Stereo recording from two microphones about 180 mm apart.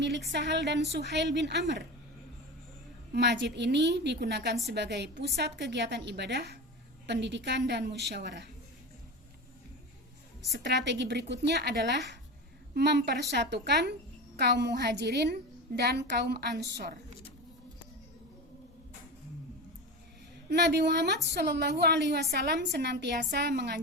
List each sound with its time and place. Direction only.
0.3 s a woman's voice: 70° right (ahead or behind)
3.1 s a woman's voice: 70° right (ahead or behind)
10.6 s a woman's voice: 75° right (ahead or behind)
20.5 s a woman's voice: 70° right (ahead or behind)